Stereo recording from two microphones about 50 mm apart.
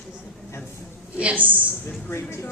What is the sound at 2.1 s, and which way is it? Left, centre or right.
Speech, left.